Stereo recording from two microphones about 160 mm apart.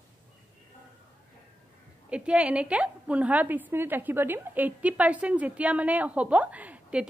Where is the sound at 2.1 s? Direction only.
5° right (ahead or behind).